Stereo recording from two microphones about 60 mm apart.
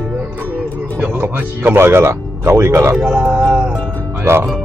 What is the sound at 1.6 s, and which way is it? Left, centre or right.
Speech, right.